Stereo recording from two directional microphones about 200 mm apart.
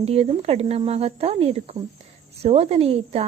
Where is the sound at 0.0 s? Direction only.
30° right (ahead or behind).